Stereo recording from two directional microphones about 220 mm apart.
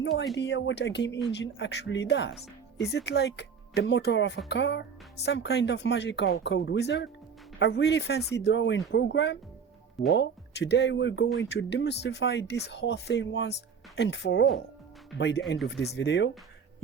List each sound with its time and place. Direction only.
0.0 s speech: 50° left (ahead or behind)